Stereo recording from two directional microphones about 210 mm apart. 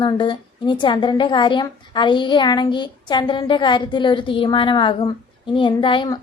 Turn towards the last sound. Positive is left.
turn(degrees=25)  # may be behind; listen again after turning